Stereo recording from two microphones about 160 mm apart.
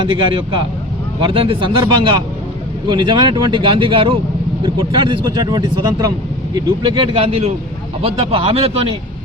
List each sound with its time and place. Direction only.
0.0 s speech: 30° right (ahead or behind)